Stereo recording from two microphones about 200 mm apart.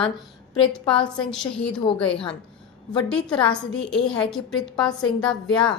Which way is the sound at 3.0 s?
5° left (ahead or behind).